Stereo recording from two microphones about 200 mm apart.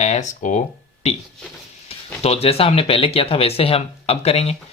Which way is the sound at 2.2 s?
30° left (ahead or behind).